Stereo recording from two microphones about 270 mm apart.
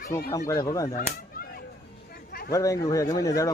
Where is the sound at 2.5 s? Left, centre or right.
Centre.